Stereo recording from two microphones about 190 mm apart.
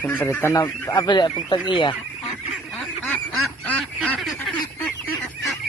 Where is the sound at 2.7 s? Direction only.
5° left (ahead or behind).